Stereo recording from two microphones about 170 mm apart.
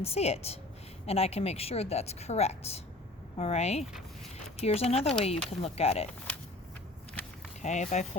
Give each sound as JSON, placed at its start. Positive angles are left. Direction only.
{"t": 0.0, "sound": "speech", "side_deg": 35}
{"t": 7.6, "sound": "speech", "side_deg": 45}